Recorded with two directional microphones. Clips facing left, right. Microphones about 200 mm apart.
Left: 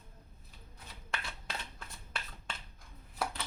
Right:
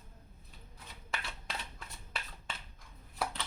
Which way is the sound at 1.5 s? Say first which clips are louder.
Even; centre (ahead or behind).